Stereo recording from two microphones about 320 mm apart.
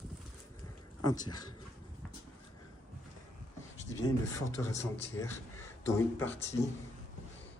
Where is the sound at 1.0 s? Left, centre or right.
Centre.